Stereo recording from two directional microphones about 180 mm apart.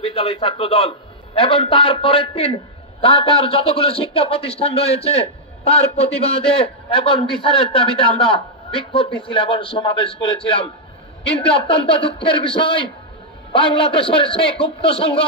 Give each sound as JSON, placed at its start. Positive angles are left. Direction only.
{"t": 0.0, "sound": "a man's voice", "side_deg": 35}